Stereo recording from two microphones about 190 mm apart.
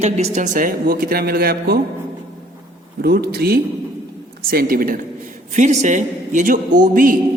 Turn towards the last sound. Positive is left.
turn(degrees=-45)  # may be behind; listen again after turning